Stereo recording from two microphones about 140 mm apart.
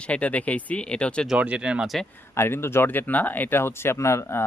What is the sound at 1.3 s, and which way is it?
Speech, 10° right (ahead or behind).